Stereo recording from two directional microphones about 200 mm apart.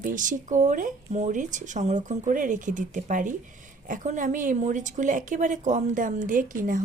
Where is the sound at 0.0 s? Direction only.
40° right (ahead or behind).